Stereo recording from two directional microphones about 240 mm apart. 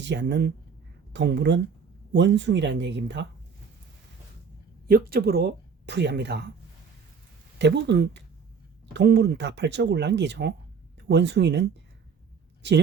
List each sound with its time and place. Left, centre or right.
0.0 s speech: right
4.9 s speech: right
7.6 s speech: right